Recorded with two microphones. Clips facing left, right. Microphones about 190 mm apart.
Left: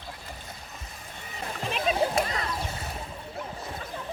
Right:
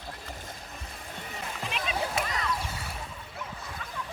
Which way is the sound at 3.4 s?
30° left (ahead or behind).